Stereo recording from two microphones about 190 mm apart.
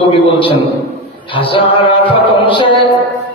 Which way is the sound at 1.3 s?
25° left (ahead or behind).